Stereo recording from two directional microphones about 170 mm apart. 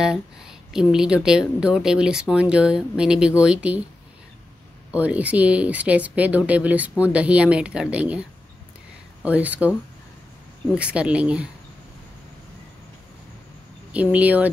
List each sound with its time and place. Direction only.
0.0 s a woman's voice: 5° right (ahead or behind)
4.9 s speech: 10° right (ahead or behind)
13.9 s speech: 10° right (ahead or behind)